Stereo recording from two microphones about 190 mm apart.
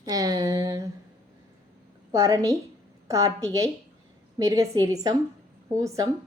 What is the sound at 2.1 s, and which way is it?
A woman's voice, 15° right (ahead or behind).